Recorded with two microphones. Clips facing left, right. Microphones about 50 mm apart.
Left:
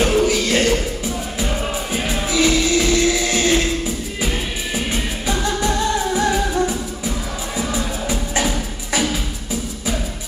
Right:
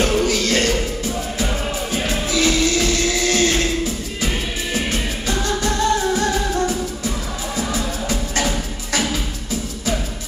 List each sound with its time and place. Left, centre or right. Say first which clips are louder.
0.0 s music: left 2 dB; centre
2.3 s music: left 2 dB; centre
4.7 s music: even; centre